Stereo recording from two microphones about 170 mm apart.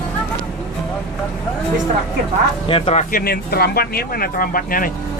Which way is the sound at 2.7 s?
35° left (ahead or behind).